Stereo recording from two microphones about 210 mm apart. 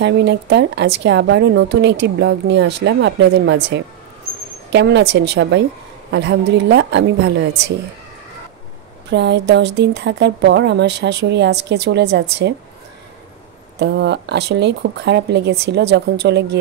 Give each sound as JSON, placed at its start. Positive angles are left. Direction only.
{"t": 0.0, "sound": "a woman's voice", "side_deg": -55}
{"t": 9.1, "sound": "a woman's voice", "side_deg": -55}
{"t": 13.7, "sound": "a woman's voice", "side_deg": -55}